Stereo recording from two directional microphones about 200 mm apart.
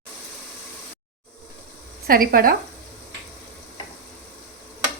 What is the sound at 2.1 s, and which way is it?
Speech, 45° right (ahead or behind).